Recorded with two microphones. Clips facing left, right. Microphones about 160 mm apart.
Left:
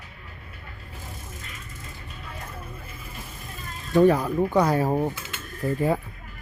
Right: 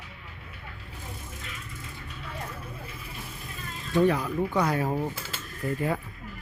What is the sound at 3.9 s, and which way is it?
Speech, 45° left (ahead or behind).